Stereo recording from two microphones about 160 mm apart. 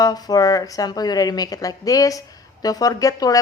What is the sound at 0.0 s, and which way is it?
Speech, 25° left (ahead or behind).